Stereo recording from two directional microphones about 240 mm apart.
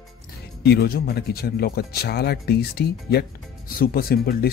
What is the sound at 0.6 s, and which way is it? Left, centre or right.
Speech, left.